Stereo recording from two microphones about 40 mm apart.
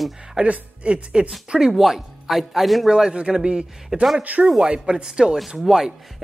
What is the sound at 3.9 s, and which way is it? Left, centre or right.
Speech, centre.